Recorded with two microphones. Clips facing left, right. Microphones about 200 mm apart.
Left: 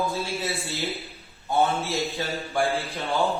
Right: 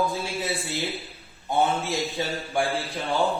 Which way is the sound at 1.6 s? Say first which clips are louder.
Even; 15° right (ahead or behind).